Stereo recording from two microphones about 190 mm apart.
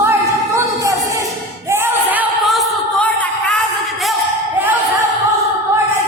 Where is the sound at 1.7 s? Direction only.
10° right (ahead or behind).